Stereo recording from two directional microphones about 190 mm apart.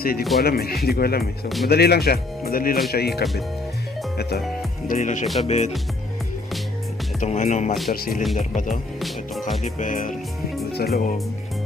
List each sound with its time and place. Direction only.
0.0 s speech: 50° left (ahead or behind)
1.2 s speech: centre (ahead or behind)
1.6 s speech: 55° left (ahead or behind)
4.9 s speech: 40° left (ahead or behind)
7.2 s speech: 40° left (ahead or behind)
9.0 s music: centre (ahead or behind)
9.7 s speech: 45° left (ahead or behind)